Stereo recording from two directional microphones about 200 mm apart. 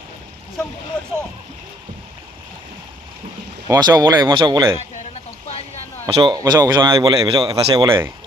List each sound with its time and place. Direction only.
3.7 s a man's voice: 20° right (ahead or behind)
6.1 s a man's voice: 25° right (ahead or behind)